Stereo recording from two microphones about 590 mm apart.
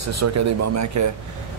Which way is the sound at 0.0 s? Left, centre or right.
Right.